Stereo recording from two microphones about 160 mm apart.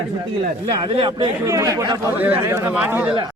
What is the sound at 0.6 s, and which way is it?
Speech, 25° right (ahead or behind).